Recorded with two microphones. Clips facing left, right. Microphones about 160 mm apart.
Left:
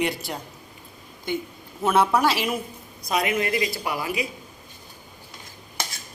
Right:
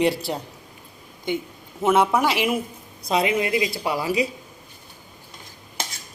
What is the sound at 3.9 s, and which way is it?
Speech, 30° right (ahead or behind).